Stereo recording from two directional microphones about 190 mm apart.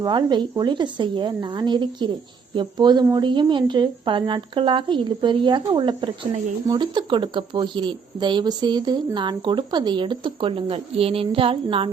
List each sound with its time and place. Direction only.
0.0 s a woman's voice: 25° right (ahead or behind)